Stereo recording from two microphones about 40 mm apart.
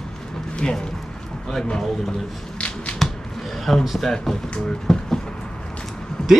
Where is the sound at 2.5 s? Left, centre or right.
Left.